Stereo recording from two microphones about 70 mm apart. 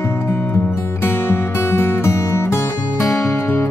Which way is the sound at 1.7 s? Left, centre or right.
Left.